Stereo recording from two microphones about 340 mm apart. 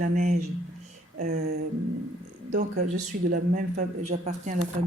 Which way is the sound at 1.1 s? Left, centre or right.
Right.